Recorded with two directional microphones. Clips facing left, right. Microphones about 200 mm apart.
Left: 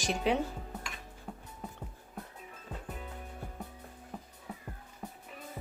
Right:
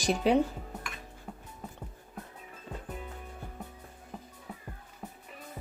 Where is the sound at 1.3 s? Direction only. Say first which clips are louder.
Left 1 dB; centre (ahead or behind).